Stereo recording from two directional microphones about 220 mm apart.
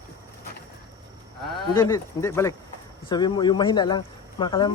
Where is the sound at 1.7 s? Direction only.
15° left (ahead or behind).